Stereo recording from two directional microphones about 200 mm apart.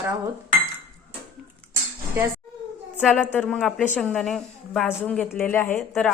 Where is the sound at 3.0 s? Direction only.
Centre (ahead or behind).